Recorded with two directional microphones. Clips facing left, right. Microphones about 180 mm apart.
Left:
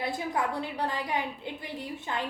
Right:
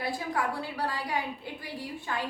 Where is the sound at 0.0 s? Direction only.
20° left (ahead or behind).